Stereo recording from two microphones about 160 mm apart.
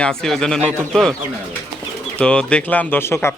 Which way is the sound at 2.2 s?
5° left (ahead or behind).